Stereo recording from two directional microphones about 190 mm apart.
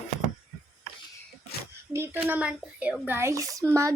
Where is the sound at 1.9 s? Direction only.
10° right (ahead or behind).